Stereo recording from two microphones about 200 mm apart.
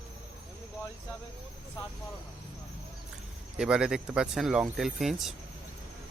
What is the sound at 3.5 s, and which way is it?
Speech, 5° right (ahead or behind).